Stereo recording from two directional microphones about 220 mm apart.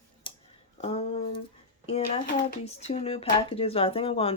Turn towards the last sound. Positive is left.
turn(degrees=25)  # may be behind; listen again after turning